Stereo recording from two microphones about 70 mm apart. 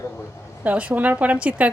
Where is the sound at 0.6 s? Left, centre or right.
Right.